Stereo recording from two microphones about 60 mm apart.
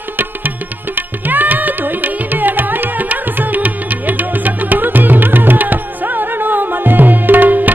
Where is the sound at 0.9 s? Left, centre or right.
Right.